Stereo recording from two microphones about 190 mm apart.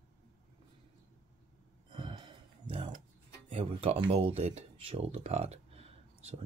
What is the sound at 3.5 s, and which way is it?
Speech, 30° right (ahead or behind).